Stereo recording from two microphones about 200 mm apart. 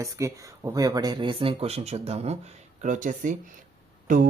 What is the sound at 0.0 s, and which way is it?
Speech, 15° right (ahead or behind).